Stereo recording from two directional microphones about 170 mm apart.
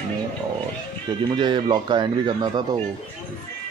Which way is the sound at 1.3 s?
30° right (ahead or behind).